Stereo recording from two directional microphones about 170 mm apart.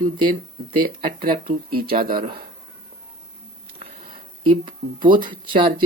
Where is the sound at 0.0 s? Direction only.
25° right (ahead or behind).